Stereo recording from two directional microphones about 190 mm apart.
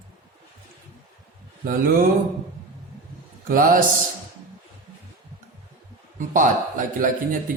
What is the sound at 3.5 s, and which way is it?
Speech, 50° right (ahead or behind).